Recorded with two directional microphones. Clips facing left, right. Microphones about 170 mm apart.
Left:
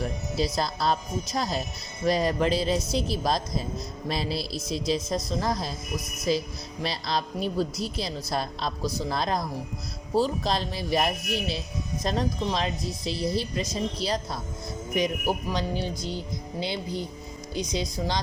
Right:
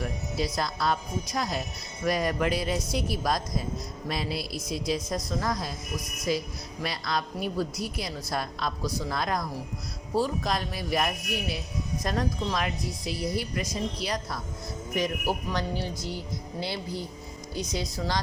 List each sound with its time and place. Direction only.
0.0 s a woman's voice: 30° left (ahead or behind)